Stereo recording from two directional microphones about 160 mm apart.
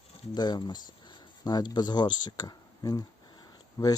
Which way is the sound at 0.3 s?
25° left (ahead or behind).